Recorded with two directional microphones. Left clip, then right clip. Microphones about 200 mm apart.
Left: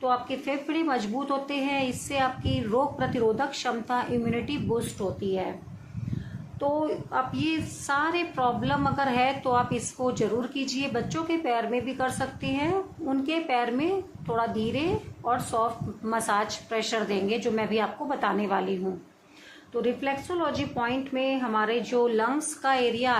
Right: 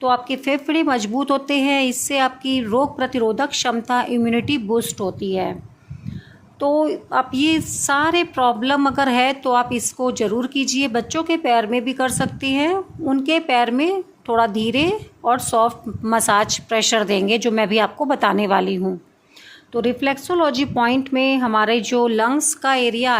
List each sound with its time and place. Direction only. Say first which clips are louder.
0.0 s speech: right 8 dB; 55° right (ahead or behind)
6.6 s a woman's voice: right 9 dB; 60° right (ahead or behind)